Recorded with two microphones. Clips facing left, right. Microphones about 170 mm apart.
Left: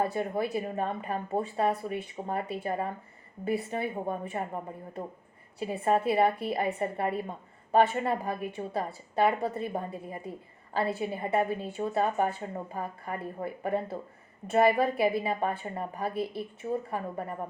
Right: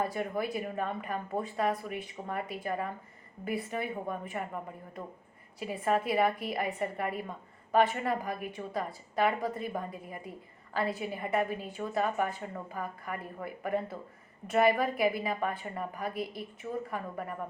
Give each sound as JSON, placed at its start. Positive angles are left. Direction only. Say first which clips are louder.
{"t": 0.0, "sound": "a woman's voice", "louder": "left 3 dB", "side_deg": 30}